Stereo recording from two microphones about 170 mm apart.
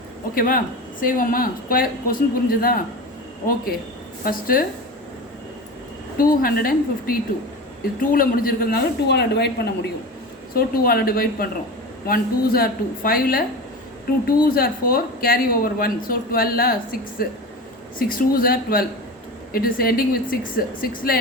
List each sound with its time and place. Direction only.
0.3 s a woman's voice: 55° left (ahead or behind)
4.2 s a woman's voice: 55° left (ahead or behind)
6.1 s a woman's voice: 60° left (ahead or behind); by 9.9 s 75° left (ahead or behind)
10.5 s a woman's voice: 60° left (ahead or behind)